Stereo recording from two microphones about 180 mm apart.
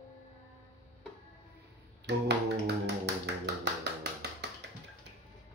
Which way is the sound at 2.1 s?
70° right (ahead or behind).